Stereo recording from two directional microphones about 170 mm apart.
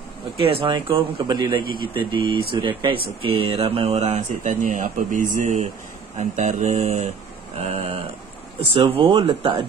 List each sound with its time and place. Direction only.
0.4 s speech: 35° right (ahead or behind)
1.6 s speech: 60° left (ahead or behind)
2.0 s speech: 30° right (ahead or behind)